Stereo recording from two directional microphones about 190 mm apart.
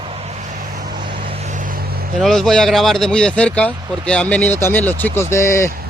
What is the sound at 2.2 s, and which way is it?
Speech, centre (ahead or behind).